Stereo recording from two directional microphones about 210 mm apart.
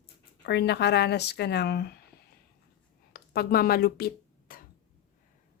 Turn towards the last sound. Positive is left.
turn(degrees=45)  # may be behind; listen again after turning